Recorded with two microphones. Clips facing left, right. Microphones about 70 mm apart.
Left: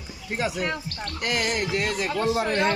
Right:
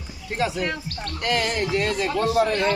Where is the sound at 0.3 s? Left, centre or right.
Centre.